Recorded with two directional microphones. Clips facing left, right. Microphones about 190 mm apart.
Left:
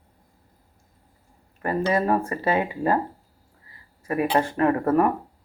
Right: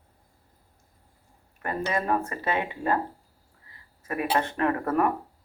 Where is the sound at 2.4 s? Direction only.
35° left (ahead or behind).